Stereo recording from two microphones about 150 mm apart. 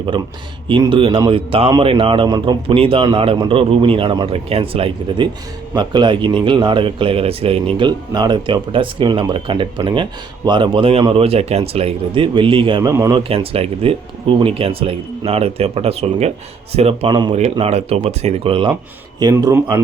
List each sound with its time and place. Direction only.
0.9 s speech: 35° right (ahead or behind)
12.9 s speech: 20° right (ahead or behind)
13.1 s speech: 40° right (ahead or behind)
17.1 s speech: 30° right (ahead or behind)
17.3 s speech: 45° right (ahead or behind)
19.3 s speech: 20° right (ahead or behind)